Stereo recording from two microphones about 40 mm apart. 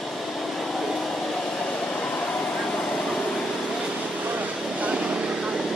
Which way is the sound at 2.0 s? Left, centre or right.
Left.